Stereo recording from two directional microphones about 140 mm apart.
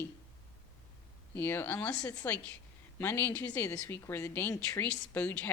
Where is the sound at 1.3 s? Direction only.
15° left (ahead or behind).